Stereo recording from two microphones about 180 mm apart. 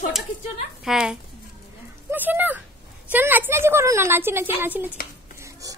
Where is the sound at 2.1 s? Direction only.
10° right (ahead or behind).